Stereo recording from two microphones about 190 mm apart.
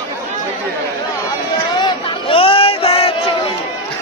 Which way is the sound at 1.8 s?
30° left (ahead or behind).